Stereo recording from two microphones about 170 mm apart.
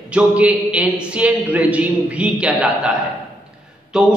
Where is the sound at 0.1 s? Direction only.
5° right (ahead or behind).